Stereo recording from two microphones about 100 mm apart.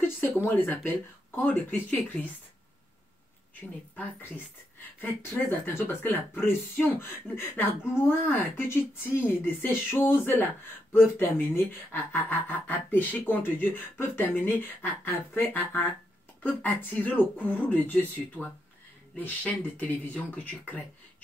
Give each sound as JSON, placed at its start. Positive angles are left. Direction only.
{"t": 0.5, "sound": "speech", "side_deg": 15}
{"t": 3.9, "sound": "speech", "side_deg": 15}
{"t": 5.5, "sound": "speech", "side_deg": 20}